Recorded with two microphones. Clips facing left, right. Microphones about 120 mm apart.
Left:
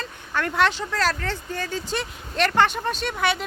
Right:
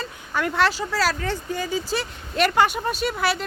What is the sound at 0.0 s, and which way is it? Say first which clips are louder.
Speech: right 1 dB; 5° right (ahead or behind).